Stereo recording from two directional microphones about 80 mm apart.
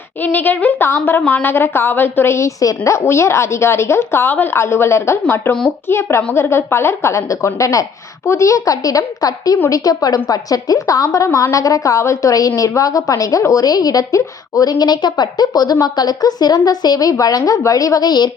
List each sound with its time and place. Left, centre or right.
0.2 s a woman's voice: left
2.6 s a woman's voice: left